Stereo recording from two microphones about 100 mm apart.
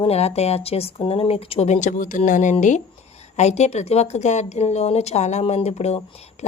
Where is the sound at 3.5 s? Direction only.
90° left.